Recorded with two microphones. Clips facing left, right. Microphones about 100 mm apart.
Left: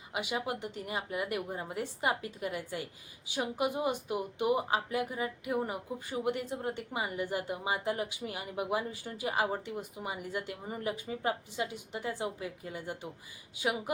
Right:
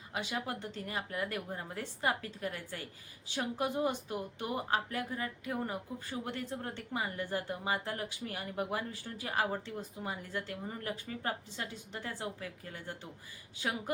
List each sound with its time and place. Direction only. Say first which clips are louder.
0.1 s speech: left 3 dB; 10° left (ahead or behind)